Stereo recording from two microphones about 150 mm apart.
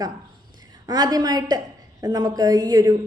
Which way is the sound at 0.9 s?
25° right (ahead or behind).